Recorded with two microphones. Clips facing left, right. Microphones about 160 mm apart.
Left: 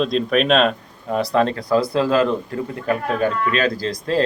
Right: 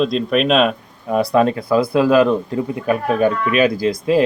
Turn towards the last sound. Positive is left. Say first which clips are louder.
# right 5 dB
turn(degrees=-10)  # may be behind; listen again after turning